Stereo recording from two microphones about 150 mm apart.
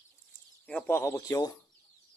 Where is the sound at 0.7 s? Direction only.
15° left (ahead or behind).